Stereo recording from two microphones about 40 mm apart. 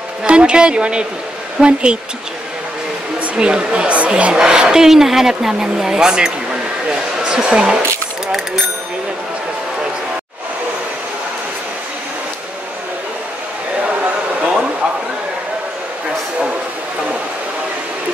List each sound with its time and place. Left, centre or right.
0.2 s a woman's voice: right
3.3 s a woman's voice: right
4.3 s speech: centre